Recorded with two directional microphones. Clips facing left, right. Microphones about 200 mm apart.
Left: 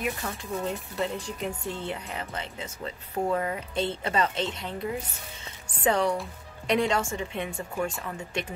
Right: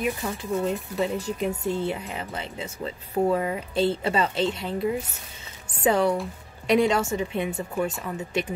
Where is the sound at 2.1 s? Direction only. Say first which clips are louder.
Right 2 dB; 25° right (ahead or behind).